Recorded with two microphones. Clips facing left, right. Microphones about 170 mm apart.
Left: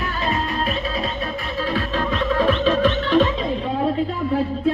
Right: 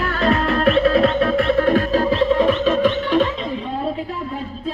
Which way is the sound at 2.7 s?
15° right (ahead or behind).